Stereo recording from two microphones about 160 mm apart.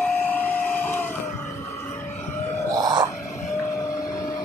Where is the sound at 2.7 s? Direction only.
25° right (ahead or behind).